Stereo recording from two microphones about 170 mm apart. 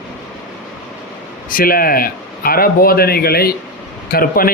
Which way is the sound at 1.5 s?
55° left (ahead or behind).